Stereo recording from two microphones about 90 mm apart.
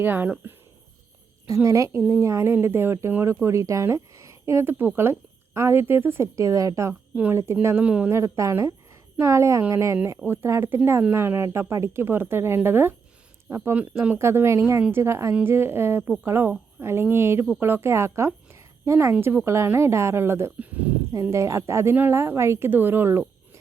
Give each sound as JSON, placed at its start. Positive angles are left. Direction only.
{"t": 0.0, "sound": "a woman's voice", "side_deg": -25}
{"t": 1.5, "sound": "a woman's voice", "side_deg": -35}
{"t": 7.9, "sound": "speech", "side_deg": -15}
{"t": 8.1, "sound": "a woman's voice", "side_deg": -35}
{"t": 14.2, "sound": "a woman's voice", "side_deg": -30}
{"t": 20.6, "sound": "speech", "side_deg": -15}
{"t": 21.1, "sound": "a woman's voice", "side_deg": -35}